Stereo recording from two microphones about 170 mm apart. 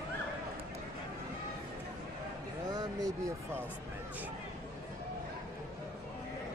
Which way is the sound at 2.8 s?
20° right (ahead or behind).